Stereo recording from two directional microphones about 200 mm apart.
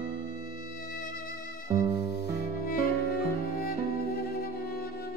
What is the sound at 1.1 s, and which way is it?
Music, 45° left (ahead or behind).